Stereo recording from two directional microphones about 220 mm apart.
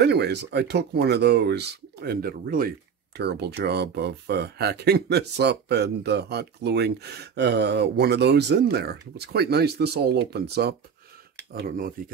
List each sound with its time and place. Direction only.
0.0 s speech: 50° right (ahead or behind)